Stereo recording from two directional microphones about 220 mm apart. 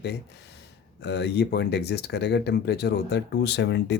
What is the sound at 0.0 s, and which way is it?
Speech, 50° left (ahead or behind).